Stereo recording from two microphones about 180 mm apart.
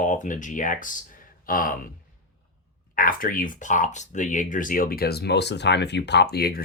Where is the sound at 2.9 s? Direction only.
50° left (ahead or behind).